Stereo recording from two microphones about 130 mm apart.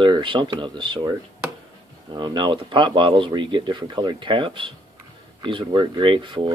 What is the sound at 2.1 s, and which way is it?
Speech, 35° right (ahead or behind).